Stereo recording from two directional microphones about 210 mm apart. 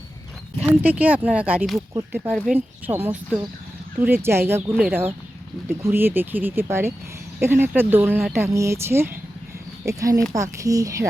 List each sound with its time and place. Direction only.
0.6 s speech: 5° right (ahead or behind)
2.3 s speech: 5° left (ahead or behind)
2.6 s speech: 10° right (ahead or behind)